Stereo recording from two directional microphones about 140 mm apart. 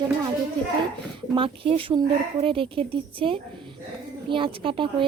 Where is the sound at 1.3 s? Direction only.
40° right (ahead or behind).